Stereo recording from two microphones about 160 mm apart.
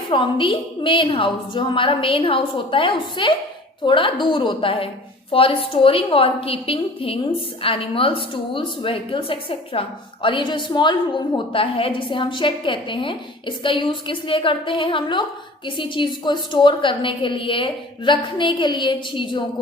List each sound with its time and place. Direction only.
0.1 s a woman's voice: 30° left (ahead or behind)